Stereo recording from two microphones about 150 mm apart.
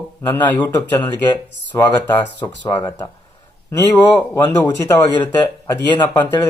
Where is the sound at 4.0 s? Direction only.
25° left (ahead or behind).